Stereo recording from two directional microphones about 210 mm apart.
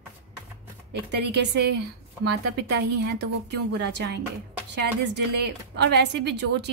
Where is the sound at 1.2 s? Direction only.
55° right (ahead or behind).